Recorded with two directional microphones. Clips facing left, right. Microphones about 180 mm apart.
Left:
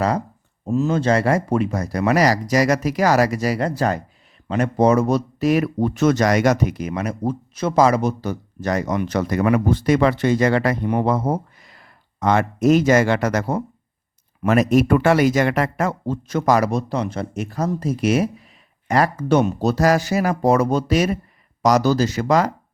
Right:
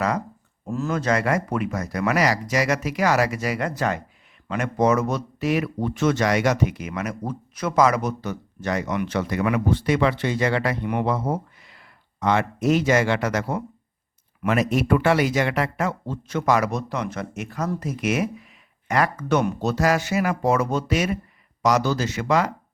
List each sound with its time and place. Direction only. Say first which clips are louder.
0.6 s speech: left 6 dB; 20° left (ahead or behind); by 22.5 s 40° left (ahead or behind)